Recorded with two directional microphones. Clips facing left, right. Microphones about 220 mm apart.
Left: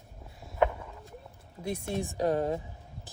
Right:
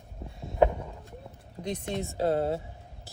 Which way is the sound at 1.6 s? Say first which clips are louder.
Even; 10° left (ahead or behind).